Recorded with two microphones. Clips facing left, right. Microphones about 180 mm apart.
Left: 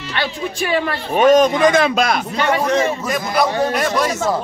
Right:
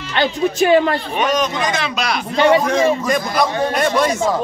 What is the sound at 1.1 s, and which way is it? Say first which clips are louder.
A man's voice: left 12 dB; 50° left (ahead or behind).